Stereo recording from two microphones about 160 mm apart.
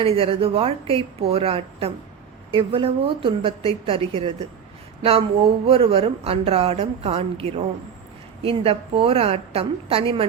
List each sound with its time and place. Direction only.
0.0 s a woman's voice: 35° right (ahead or behind)
5.6 s a woman's voice: 35° right (ahead or behind)